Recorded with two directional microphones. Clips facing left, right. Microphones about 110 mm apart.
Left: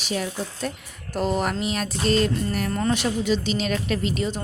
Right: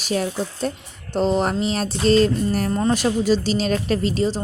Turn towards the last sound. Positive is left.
turn(degrees=-30)  # may be behind; listen again after turning